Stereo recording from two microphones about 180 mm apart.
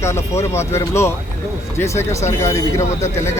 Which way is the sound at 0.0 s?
15° left (ahead or behind).